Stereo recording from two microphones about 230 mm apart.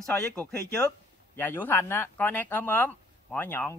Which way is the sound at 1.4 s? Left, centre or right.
Centre.